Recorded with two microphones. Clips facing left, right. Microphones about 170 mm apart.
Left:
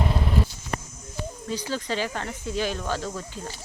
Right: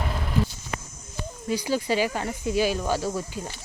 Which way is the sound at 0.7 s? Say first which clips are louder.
Left 6 dB; 40° left (ahead or behind).